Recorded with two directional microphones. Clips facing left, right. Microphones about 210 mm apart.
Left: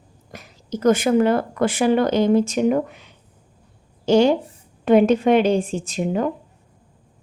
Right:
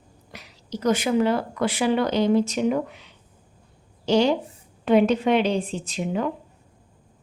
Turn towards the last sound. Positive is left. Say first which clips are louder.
# left 4 dB
turn(degrees=45)  # may be behind; listen again after turning